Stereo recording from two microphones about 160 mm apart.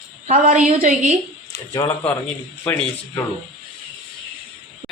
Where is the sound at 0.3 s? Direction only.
45° right (ahead or behind).